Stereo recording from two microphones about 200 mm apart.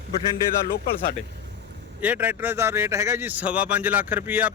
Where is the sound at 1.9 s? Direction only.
10° right (ahead or behind).